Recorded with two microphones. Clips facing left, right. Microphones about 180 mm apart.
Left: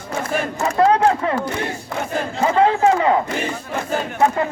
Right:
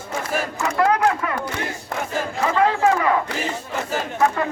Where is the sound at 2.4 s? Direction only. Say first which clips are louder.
Left 3 dB; 25° left (ahead or behind).